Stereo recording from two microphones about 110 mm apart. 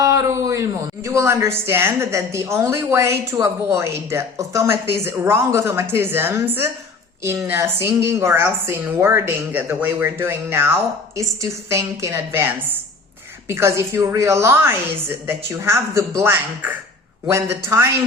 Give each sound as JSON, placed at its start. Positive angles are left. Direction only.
{"t": 0.0, "sound": "a woman's voice", "side_deg": -30}
{"t": 7.8, "sound": "a woman's voice", "side_deg": -25}